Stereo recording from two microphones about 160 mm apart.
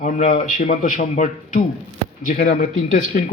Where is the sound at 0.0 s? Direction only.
50° left (ahead or behind).